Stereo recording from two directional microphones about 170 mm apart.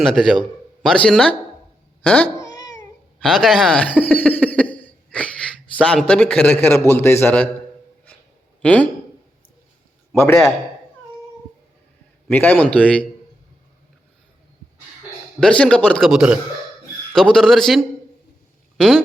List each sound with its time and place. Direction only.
0.0 s a man's voice: 5° left (ahead or behind)
2.6 s cat: 20° left (ahead or behind)
3.2 s speech: centre (ahead or behind)
4.1 s a sound: 10° left (ahead or behind)
5.8 s a man's voice: 5° left (ahead or behind)
8.6 s a man's voice: 10° left (ahead or behind)
10.1 s a man's voice: 10° left (ahead or behind)
12.3 s a man's voice: 10° left (ahead or behind)
15.4 s speech: 5° left (ahead or behind)